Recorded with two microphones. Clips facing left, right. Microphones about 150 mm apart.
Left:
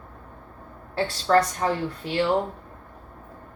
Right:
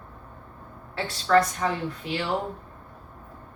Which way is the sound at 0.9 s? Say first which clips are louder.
Left 1 dB; 35° left (ahead or behind).